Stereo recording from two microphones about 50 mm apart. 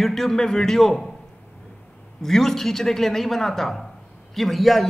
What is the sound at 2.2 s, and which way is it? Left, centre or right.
A man's voice, centre.